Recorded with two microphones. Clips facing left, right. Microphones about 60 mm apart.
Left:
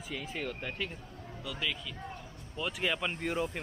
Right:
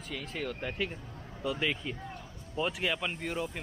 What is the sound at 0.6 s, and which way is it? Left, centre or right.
Speech, centre.